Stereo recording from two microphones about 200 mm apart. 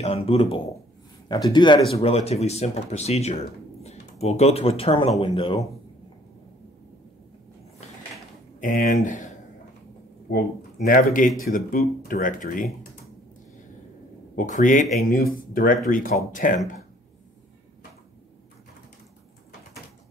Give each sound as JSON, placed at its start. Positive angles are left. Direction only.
{"t": 0.0, "sound": "speech", "side_deg": 30}
{"t": 8.5, "sound": "speech", "side_deg": 40}
{"t": 10.3, "sound": "speech", "side_deg": 50}
{"t": 14.3, "sound": "speech", "side_deg": 40}